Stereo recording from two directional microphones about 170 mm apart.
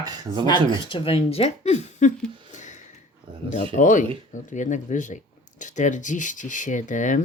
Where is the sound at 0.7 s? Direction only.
30° left (ahead or behind).